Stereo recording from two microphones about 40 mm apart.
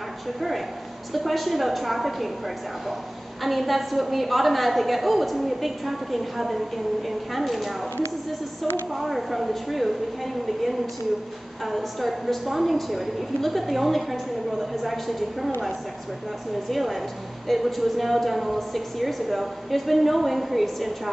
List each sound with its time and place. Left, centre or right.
0.4 s a woman's voice: centre
8.9 s a woman's voice: centre
16.7 s a woman's voice: centre